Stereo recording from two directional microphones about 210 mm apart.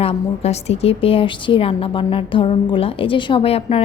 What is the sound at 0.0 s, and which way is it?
A woman's voice, 30° left (ahead or behind).